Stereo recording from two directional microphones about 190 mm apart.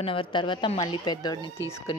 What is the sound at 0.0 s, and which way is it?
Speech, 30° left (ahead or behind).